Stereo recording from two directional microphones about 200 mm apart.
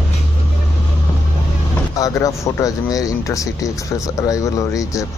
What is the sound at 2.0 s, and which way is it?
Speech, 15° left (ahead or behind).